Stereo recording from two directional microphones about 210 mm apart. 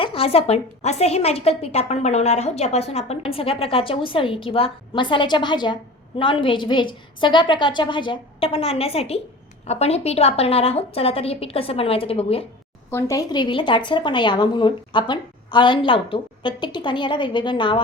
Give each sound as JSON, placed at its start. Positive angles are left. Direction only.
{"t": 0.0, "sound": "a woman's voice", "side_deg": 25}
{"t": 12.9, "sound": "a woman's voice", "side_deg": 15}